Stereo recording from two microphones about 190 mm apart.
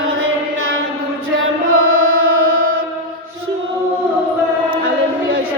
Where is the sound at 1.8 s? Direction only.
90° right.